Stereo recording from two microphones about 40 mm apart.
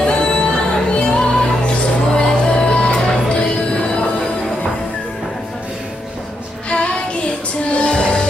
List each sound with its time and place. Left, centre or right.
0.0 s music: left
6.7 s music: left